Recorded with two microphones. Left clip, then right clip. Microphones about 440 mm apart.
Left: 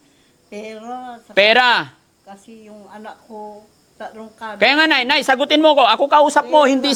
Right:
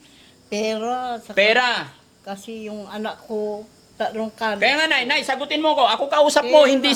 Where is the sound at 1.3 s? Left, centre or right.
Left.